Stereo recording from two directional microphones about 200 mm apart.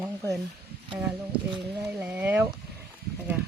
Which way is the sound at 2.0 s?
10° right (ahead or behind).